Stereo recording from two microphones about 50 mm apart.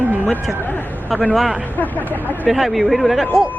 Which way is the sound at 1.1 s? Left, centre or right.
Centre.